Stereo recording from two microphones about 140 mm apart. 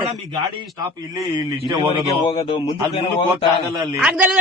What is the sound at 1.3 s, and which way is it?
Speech, 30° right (ahead or behind).